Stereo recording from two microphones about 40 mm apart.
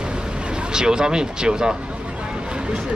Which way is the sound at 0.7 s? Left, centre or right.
Centre.